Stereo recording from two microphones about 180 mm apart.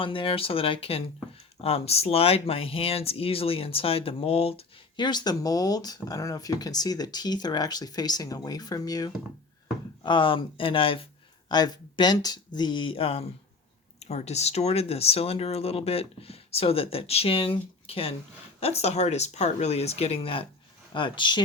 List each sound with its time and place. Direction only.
0.0 s speech: 30° left (ahead or behind)